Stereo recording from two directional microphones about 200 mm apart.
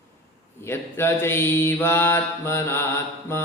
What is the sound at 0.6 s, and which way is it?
Mantra, 10° left (ahead or behind).